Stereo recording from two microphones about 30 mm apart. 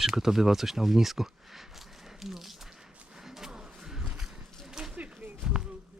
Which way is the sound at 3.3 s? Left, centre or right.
Centre.